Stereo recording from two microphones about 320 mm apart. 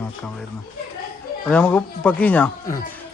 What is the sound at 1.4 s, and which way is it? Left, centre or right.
Speech, centre.